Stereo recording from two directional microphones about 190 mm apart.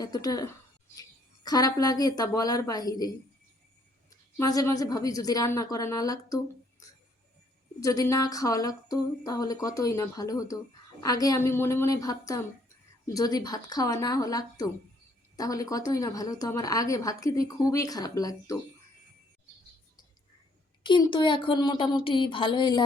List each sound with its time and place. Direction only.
0.0 s a woman's voice: 20° left (ahead or behind)
4.1 s a woman's voice: 20° left (ahead or behind)
20.8 s a woman's voice: 25° left (ahead or behind)